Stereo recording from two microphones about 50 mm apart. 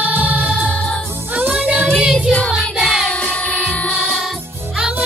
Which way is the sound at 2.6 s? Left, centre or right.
Centre.